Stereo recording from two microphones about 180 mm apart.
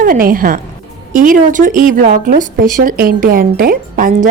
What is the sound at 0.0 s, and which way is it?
Speech, 50° right (ahead or behind).